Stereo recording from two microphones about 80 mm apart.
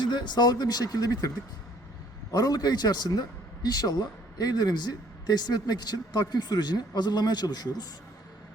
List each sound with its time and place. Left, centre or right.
0.0 s a man's voice: left
2.3 s a man's voice: left